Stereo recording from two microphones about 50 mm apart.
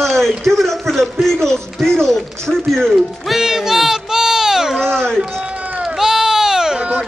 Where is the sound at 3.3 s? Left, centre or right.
Centre.